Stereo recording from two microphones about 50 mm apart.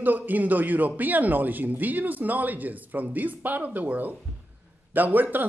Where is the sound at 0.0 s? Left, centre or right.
Right.